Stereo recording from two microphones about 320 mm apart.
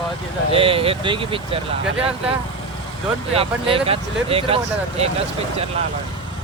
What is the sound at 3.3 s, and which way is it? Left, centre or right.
Speech, centre.